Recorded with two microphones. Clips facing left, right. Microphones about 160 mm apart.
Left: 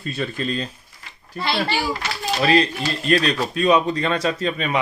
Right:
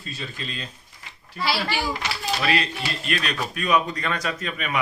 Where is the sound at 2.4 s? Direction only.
35° left (ahead or behind).